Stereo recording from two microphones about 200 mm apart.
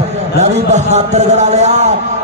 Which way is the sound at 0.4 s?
35° right (ahead or behind).